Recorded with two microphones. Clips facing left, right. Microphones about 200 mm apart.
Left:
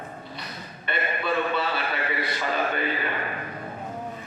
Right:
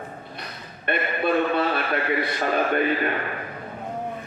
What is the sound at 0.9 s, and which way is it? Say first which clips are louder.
A man's voice: right 5 dB; 55° right (ahead or behind).